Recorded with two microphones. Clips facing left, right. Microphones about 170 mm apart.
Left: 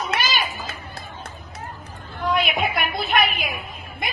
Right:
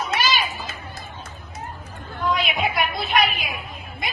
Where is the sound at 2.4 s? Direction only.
55° left (ahead or behind).